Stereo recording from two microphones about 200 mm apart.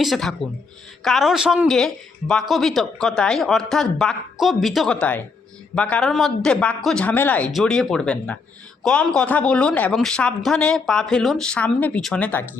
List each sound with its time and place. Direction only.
0.0 s speech: centre (ahead or behind)